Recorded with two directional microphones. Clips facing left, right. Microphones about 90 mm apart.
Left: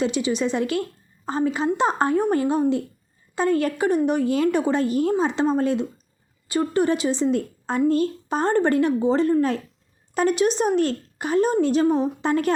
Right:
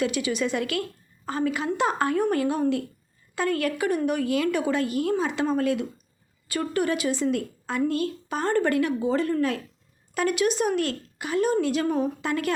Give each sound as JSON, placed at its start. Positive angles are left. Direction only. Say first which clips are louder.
{"t": 0.0, "sound": "a woman's voice", "louder": "left 3 dB", "side_deg": 25}